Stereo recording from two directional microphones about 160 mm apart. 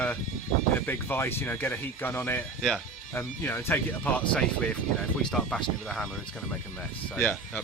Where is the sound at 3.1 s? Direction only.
15° left (ahead or behind).